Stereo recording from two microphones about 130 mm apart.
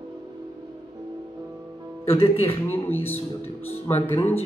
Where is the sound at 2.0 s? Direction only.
45° left (ahead or behind).